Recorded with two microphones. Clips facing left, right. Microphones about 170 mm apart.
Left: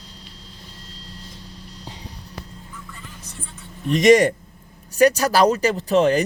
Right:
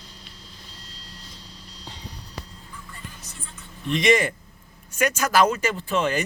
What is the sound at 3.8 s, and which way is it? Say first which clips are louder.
Speech: left 7 dB; 40° left (ahead or behind).